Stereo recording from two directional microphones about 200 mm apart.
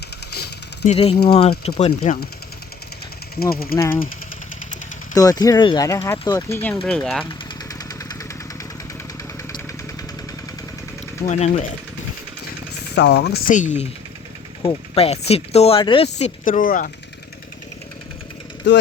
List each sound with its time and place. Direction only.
0.3 s engine: 55° left (ahead or behind)
0.9 s speech: 30° left (ahead or behind)
3.4 s speech: 50° left (ahead or behind)
3.8 s speech: 10° left (ahead or behind)
5.1 s speech: 20° left (ahead or behind)
7.3 s engine: 15° left (ahead or behind)
11.3 s speech: 35° left (ahead or behind)
13.0 s speech: 55° left (ahead or behind); by 16.0 s 25° left (ahead or behind)
16.1 s speech: 40° left (ahead or behind)
18.6 s speech: 65° left (ahead or behind)